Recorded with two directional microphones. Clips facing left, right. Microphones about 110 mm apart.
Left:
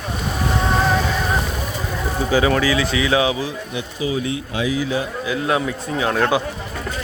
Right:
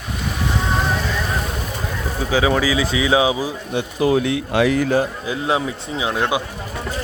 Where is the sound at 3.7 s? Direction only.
65° right (ahead or behind).